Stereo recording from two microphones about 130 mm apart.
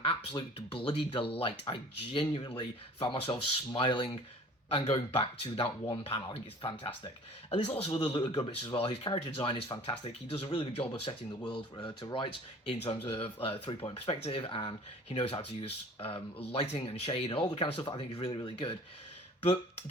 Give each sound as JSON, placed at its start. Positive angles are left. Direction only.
{"t": 0.0, "sound": "speech", "side_deg": 45}
{"t": 7.5, "sound": "speech", "side_deg": 50}